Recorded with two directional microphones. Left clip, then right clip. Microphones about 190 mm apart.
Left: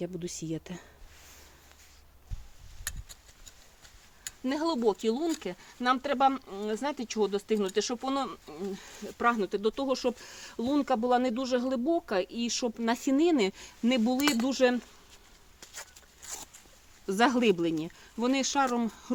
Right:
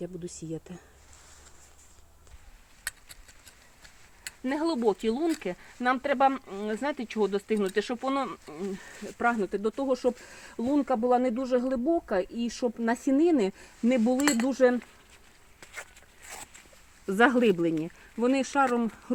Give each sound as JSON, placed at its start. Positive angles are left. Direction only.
{"t": 0.3, "sound": "speech", "side_deg": 0}
{"t": 2.9, "sound": "a sound", "side_deg": 5}
{"t": 4.4, "sound": "speech", "side_deg": -30}
{"t": 9.5, "sound": "speech", "side_deg": -30}
{"t": 15.6, "sound": "a sound", "side_deg": -35}
{"t": 17.1, "sound": "speech", "side_deg": -25}